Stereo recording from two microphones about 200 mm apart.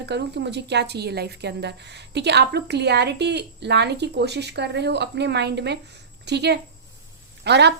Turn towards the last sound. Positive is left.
turn(degrees=-55)  # may be behind; listen again after turning